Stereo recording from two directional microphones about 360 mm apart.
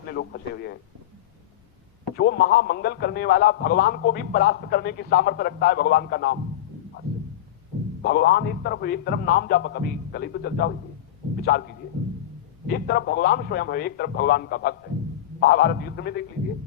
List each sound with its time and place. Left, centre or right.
0.1 s speech: left
2.1 s speech: left
8.0 s speech: left